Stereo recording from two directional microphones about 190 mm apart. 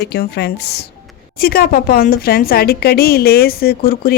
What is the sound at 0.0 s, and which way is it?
A woman's voice, 60° left (ahead or behind).